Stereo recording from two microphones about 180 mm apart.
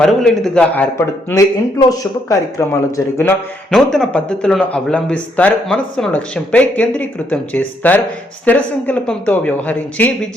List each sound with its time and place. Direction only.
0.0 s speech: centre (ahead or behind)
3.7 s a man's voice: 5° left (ahead or behind)